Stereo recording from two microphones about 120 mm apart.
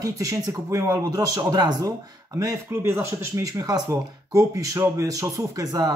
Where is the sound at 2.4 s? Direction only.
25° right (ahead or behind).